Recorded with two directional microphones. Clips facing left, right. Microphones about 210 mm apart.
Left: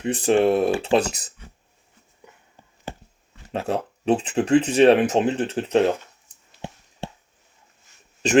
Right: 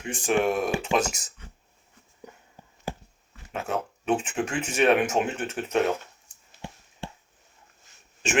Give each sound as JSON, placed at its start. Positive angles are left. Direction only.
{"t": 0.0, "sound": "speech", "side_deg": 35}
{"t": 3.5, "sound": "speech", "side_deg": 35}